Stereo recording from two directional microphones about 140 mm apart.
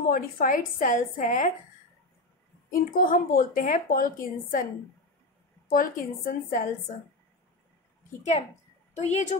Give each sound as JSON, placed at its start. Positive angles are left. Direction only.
{"t": 0.1, "sound": "a woman's voice", "side_deg": 85}
{"t": 2.7, "sound": "a woman's voice", "side_deg": 90}
{"t": 5.7, "sound": "a woman's voice", "side_deg": 85}
{"t": 8.9, "sound": "speech", "side_deg": 55}